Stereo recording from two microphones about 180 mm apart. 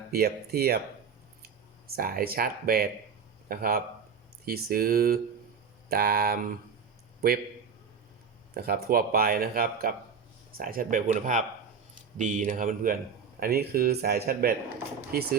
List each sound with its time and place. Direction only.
0.1 s speech: 60° right (ahead or behind)
2.0 s speech: 55° right (ahead or behind)
8.5 s speech: 55° right (ahead or behind)